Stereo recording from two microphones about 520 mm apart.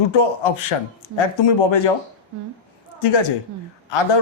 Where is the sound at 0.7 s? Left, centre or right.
Left.